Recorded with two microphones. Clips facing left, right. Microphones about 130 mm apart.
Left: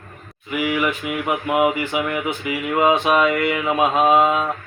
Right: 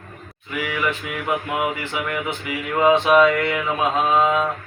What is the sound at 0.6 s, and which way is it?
Mantra, 15° left (ahead or behind).